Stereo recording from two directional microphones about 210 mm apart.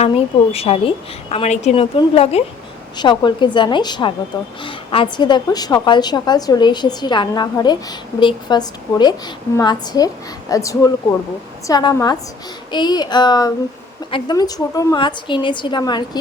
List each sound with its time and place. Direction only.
0.5 s a woman's voice: 30° left (ahead or behind)